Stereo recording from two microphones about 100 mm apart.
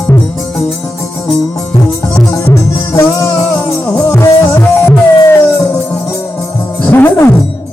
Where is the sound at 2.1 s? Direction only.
30° left (ahead or behind).